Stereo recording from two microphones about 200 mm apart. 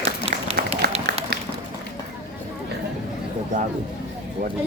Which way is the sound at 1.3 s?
55° right (ahead or behind).